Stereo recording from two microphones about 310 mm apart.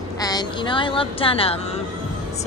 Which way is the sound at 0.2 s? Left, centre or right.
Centre.